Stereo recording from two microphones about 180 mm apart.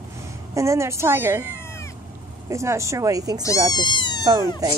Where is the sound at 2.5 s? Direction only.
15° right (ahead or behind).